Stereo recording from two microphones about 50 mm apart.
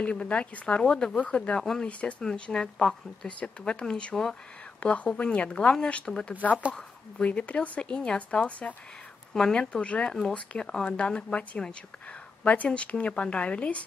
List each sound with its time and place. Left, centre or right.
0.0 s speech: left
3.3 s speech: left
4.8 s speech: left
9.3 s speech: centre
10.0 s speech: centre; by 13.8 s left